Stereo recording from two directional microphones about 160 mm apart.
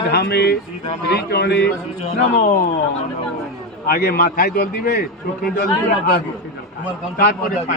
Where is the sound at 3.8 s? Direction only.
70° left (ahead or behind).